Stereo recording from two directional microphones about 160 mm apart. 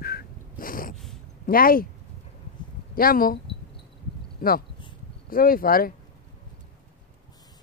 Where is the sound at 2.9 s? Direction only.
65° left (ahead or behind).